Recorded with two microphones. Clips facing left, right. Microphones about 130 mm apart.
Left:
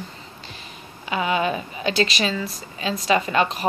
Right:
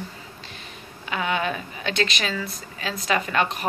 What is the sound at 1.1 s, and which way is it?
A woman's voice, 10° left (ahead or behind).